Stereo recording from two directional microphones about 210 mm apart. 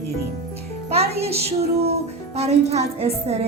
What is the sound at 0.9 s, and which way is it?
Music, 30° right (ahead or behind).